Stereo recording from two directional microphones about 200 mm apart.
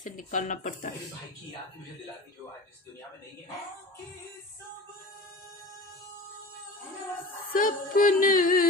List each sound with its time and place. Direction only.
0.0 s speech: 40° left (ahead or behind)
7.5 s music: 45° left (ahead or behind)